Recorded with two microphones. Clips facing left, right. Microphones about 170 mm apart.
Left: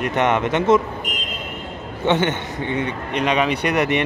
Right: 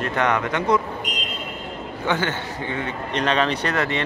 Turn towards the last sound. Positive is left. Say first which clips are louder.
# left 4 dB
turn(degrees=15)  # may be behind; listen again after turning